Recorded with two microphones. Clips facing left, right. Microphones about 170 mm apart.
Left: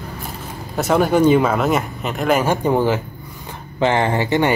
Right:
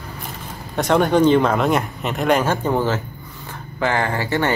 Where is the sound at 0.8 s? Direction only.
5° left (ahead or behind).